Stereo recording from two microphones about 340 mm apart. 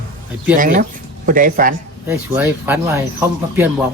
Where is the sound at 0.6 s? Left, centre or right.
Right.